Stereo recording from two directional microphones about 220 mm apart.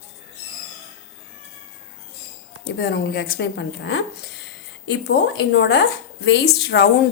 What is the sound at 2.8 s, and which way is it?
Speech, 50° left (ahead or behind).